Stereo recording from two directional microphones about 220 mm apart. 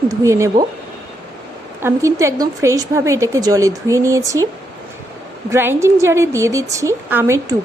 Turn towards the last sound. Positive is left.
turn(degrees=-10)  # may be behind; listen again after turning